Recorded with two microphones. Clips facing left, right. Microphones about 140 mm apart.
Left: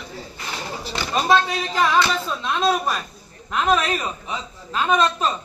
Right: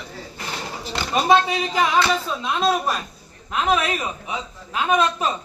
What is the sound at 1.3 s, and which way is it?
A man's voice, 15° right (ahead or behind).